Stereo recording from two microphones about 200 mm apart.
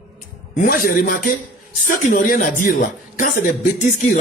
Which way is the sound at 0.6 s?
45° left (ahead or behind).